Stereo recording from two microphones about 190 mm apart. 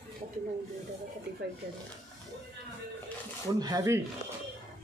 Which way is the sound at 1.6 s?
50° right (ahead or behind).